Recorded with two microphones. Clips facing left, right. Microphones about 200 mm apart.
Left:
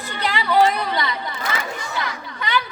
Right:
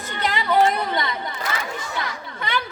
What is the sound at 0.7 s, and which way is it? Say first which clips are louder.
Chatter: even; 20° right (ahead or behind).